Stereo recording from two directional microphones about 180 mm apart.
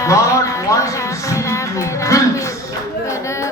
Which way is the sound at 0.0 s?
15° left (ahead or behind).